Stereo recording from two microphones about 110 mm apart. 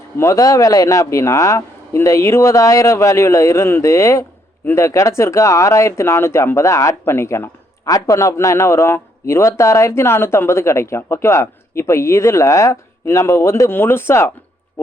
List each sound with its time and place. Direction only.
0.2 s speech: 30° left (ahead or behind)